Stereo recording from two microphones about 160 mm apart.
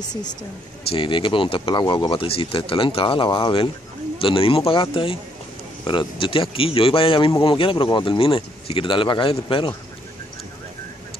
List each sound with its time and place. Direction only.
0.8 s speech: 30° left (ahead or behind)